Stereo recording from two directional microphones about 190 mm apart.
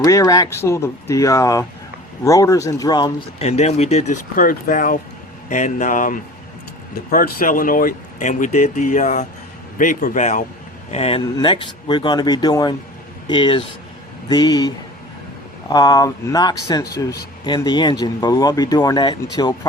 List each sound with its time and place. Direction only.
0.0 s speech: 15° left (ahead or behind)
3.3 s a man's voice: 35° left (ahead or behind)
10.9 s speech: 30° left (ahead or behind)
15.7 s speech: 20° left (ahead or behind)